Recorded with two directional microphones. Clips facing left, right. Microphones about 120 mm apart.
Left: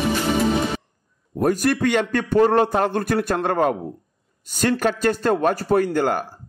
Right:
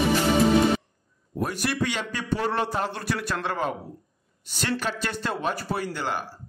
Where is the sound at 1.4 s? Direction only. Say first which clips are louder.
Left 8 dB; 45° left (ahead or behind).